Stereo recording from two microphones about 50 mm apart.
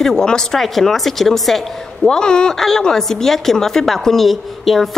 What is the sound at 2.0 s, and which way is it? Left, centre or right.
A woman's voice, centre.